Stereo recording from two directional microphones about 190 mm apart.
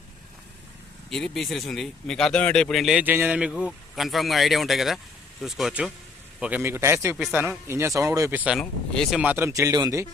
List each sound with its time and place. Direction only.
1.1 s speech: centre (ahead or behind); by 10.1 s 20° right (ahead or behind)